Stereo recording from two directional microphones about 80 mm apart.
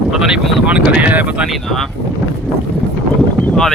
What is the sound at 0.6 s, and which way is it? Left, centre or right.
Speech, centre.